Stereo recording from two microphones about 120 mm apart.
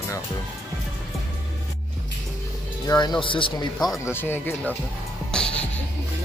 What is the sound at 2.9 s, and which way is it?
Speech, 35° left (ahead or behind).